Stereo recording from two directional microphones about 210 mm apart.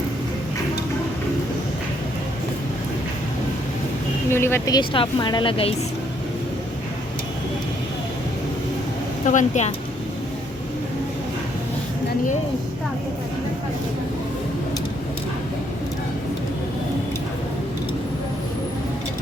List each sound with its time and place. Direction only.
4.3 s a woman's voice: 10° left (ahead or behind)
9.2 s speech: 35° left (ahead or behind)